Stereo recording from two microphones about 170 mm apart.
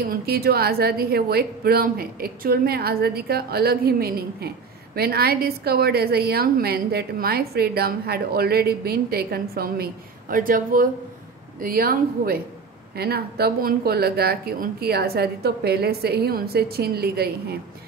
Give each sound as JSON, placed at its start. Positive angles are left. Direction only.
{"t": 0.1, "sound": "a woman's voice", "side_deg": -65}